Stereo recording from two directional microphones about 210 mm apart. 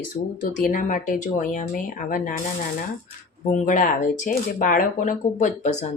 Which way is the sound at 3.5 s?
35° left (ahead or behind).